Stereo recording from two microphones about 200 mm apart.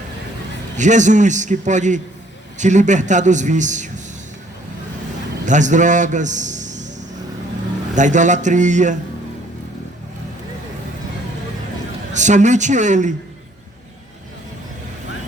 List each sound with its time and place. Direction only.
0.8 s a man's voice: 35° right (ahead or behind)
5.5 s a man's voice: 40° right (ahead or behind)
7.9 s a man's voice: 40° right (ahead or behind)
12.1 s a man's voice: 35° right (ahead or behind)